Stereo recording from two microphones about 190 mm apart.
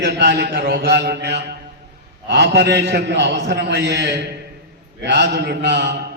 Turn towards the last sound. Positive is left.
turn(degrees=-65)  # may be behind; listen again after turning